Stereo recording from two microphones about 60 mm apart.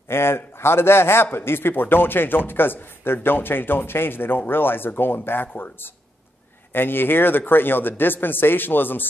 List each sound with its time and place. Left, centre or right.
0.1 s a man's voice: left